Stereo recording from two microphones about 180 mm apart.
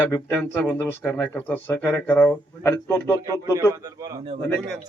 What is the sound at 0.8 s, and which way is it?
Speech, 10° left (ahead or behind).